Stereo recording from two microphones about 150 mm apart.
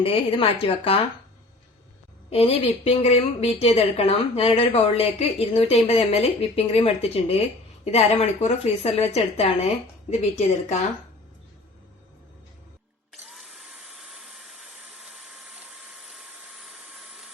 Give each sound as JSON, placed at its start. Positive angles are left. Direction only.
{"t": 0.0, "sound": "a woman's voice", "side_deg": 40}
{"t": 2.3, "sound": "a woman's voice", "side_deg": 40}
{"t": 13.2, "sound": "dental drill", "side_deg": 0}